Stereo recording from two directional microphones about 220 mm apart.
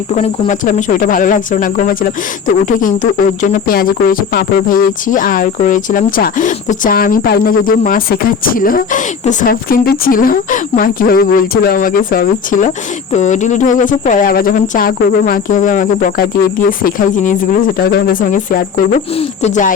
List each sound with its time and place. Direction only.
0.1 s speech: 35° left (ahead or behind)